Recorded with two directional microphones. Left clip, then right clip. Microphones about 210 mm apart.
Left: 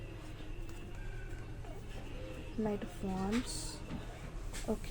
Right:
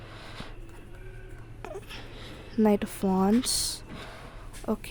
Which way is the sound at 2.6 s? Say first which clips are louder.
Right 14 dB; 60° right (ahead or behind).